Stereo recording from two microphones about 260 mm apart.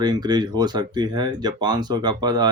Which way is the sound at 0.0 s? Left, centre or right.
Centre.